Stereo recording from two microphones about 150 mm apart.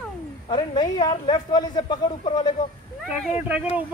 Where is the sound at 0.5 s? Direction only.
30° left (ahead or behind).